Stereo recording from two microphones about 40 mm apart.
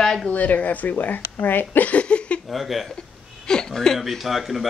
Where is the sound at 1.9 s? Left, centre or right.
Left.